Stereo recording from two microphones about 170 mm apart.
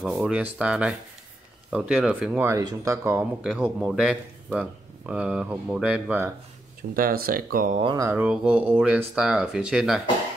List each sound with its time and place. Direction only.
0.0 s speech: centre (ahead or behind)
2.4 s speech: 20° right (ahead or behind)
3.4 s speech: 5° right (ahead or behind)
6.9 s speech: 55° right (ahead or behind)
7.9 s mantra: 20° right (ahead or behind)
8.2 s speech: 5° right (ahead or behind)